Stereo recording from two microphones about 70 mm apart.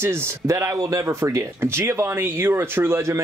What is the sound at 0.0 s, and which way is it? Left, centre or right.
Speech, right.